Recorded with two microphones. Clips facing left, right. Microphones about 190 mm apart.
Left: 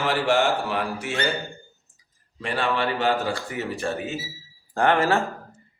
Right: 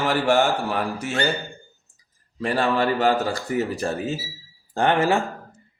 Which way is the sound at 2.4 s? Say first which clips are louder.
Right 4 dB; 40° right (ahead or behind).